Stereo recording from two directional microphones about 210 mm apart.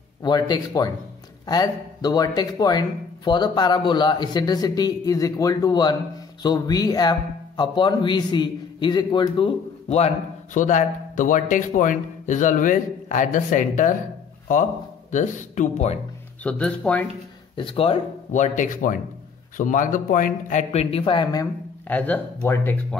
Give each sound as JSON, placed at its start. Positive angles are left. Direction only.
{"t": 0.2, "sound": "speech", "side_deg": 20}
{"t": 16.4, "sound": "speech", "side_deg": 5}
{"t": 17.6, "sound": "speech", "side_deg": 25}